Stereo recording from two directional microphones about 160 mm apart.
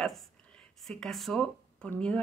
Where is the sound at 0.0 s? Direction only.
Centre (ahead or behind).